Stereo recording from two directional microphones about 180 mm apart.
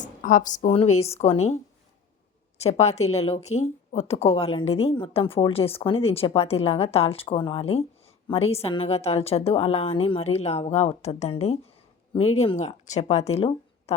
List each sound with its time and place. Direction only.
0.0 s a woman's voice: 45° left (ahead or behind)